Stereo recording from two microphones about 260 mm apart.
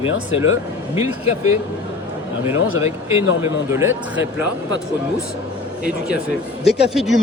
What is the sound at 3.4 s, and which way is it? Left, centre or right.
Speech, centre.